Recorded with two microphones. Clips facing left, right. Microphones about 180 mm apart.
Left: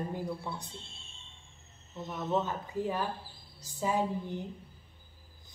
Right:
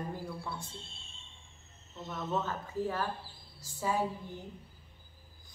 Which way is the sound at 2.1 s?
15° left (ahead or behind).